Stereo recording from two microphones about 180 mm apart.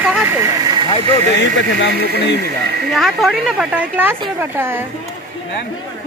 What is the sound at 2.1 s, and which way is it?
Speech, 70° left (ahead or behind).